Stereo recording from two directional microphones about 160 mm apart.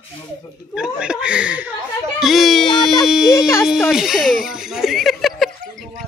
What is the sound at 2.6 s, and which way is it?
Speech, 30° left (ahead or behind).